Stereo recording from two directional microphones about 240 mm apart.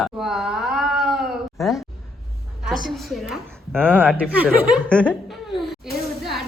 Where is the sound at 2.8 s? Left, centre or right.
Centre.